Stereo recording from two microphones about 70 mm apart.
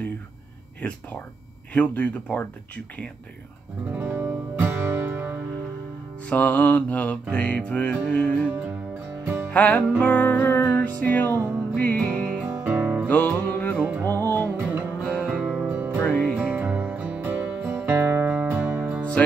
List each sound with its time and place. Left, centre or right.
0.8 s music: centre
3.9 s music: right
6.2 s music: left
9.5 s music: centre
12.6 s music: right
13.1 s music: left
14.6 s music: right
15.0 s music: centre
15.3 s music: centre
15.7 s music: right
16.0 s music: left
16.3 s music: right